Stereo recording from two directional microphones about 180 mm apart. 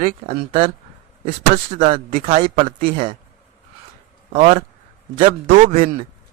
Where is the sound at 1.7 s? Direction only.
50° right (ahead or behind).